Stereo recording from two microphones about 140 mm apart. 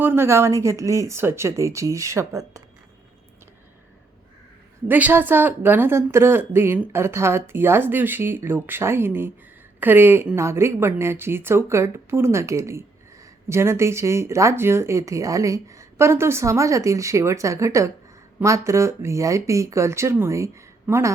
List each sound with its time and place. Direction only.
0.0 s a woman's voice: 15° right (ahead or behind)
4.9 s a woman's voice: 10° right (ahead or behind)